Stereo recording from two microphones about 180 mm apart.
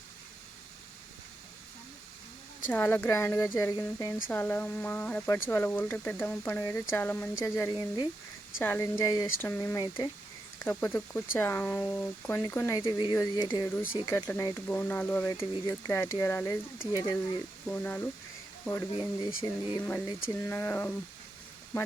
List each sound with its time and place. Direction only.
2.6 s speech: 10° left (ahead or behind)
10.6 s speech: 10° left (ahead or behind)
12.8 s speech: 25° left (ahead or behind)
14.1 s speech: 10° left (ahead or behind)
15.3 s speech: 25° left (ahead or behind)
15.7 s speech: 10° left (ahead or behind)
17.7 s speech: 10° left (ahead or behind)
18.9 s speech: 30° left (ahead or behind)
20.2 s speech: 15° left (ahead or behind)